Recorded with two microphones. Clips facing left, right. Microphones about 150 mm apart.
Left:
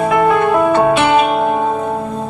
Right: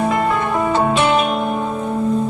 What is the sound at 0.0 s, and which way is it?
Music, 65° left (ahead or behind).